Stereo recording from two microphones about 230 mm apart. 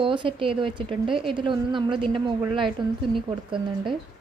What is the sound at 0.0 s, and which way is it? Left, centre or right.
A woman's voice, right.